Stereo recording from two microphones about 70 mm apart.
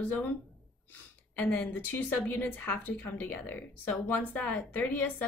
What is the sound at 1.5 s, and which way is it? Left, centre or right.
A woman's voice, left.